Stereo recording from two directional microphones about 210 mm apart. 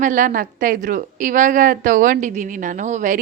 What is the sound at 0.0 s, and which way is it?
A woman's voice, 40° right (ahead or behind).